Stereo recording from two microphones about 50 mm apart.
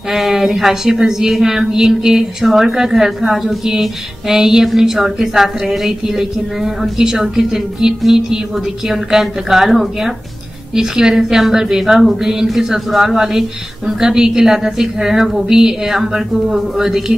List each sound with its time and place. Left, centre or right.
0.1 s a woman's voice: centre